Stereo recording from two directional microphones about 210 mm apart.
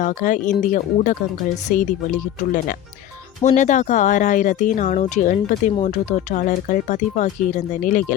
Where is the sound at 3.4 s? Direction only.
35° left (ahead or behind).